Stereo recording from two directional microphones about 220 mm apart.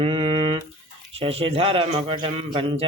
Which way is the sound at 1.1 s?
25° right (ahead or behind).